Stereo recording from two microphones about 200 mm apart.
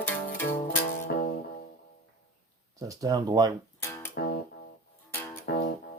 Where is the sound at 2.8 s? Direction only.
15° right (ahead or behind).